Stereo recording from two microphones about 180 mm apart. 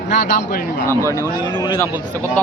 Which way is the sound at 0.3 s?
50° left (ahead or behind).